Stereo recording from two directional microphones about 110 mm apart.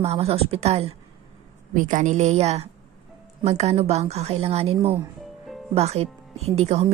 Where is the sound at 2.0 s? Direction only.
90° right.